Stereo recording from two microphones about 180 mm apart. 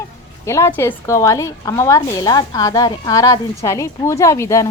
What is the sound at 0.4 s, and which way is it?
A woman's voice, 15° left (ahead or behind).